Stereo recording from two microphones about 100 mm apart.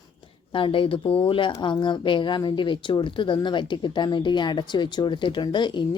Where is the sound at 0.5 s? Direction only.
60° left (ahead or behind).